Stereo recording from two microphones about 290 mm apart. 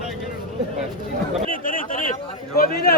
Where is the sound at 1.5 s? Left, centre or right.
Left.